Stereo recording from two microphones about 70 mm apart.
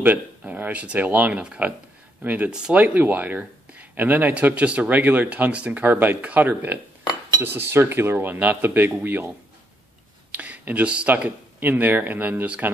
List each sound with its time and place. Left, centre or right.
0.0 s speech: right
10.3 s speech: right